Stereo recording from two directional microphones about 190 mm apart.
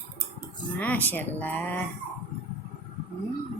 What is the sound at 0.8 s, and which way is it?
Speech, 10° left (ahead or behind).